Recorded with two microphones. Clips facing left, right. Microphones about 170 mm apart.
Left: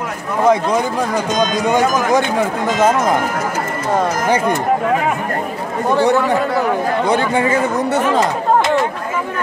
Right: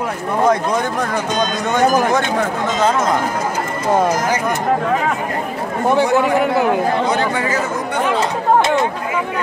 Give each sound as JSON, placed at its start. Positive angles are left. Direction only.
{"t": 0.5, "sound": "speech", "side_deg": 10}
{"t": 5.9, "sound": "speech", "side_deg": -15}